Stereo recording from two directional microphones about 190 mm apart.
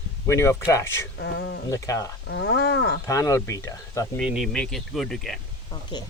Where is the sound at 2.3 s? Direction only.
65° left (ahead or behind).